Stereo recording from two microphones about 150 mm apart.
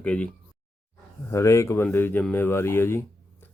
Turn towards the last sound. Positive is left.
turn(degrees=15)  # may be behind; listen again after turning